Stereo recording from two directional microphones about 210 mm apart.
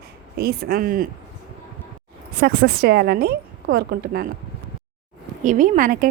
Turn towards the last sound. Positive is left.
turn(degrees=-40)  # may be behind; listen again after turning